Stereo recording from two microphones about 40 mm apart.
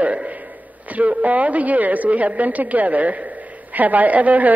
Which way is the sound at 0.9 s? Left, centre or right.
Right.